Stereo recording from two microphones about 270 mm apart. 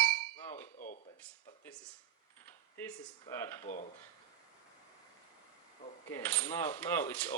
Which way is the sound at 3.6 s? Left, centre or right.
Left.